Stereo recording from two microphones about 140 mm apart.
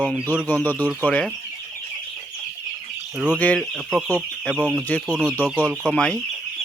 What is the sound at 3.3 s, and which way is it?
Speech, 10° left (ahead or behind).